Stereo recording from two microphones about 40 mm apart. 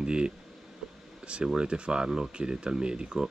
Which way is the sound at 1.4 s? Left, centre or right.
Right.